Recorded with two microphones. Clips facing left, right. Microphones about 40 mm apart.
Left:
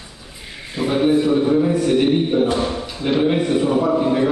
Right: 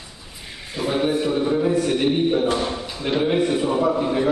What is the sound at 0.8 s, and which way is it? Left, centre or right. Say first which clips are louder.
A man's voice: left 5 dB; centre.